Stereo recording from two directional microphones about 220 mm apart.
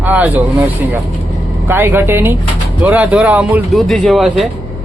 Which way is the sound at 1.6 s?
10° right (ahead or behind).